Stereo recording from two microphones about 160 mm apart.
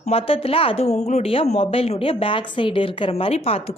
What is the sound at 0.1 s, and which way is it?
Speech, 35° left (ahead or behind).